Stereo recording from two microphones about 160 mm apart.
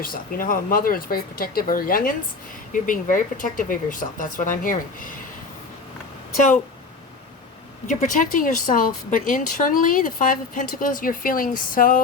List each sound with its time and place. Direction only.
0.0 s speech: 60° left (ahead or behind)
7.9 s speech: 55° left (ahead or behind)